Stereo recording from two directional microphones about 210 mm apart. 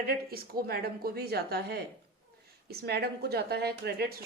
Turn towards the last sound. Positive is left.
turn(degrees=-50)  # may be behind; listen again after turning